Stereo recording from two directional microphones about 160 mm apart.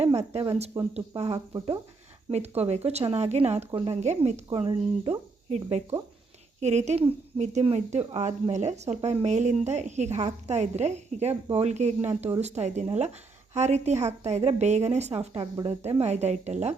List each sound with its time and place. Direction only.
0.2 s speech: 40° right (ahead or behind)
1.5 s speech: 25° right (ahead or behind)
2.3 s speech: 40° right (ahead or behind)
4.4 s speech: 35° right (ahead or behind)
6.6 s speech: 45° right (ahead or behind)